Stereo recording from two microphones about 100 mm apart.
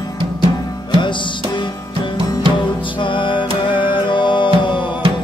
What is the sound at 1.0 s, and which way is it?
Music, 55° left (ahead or behind).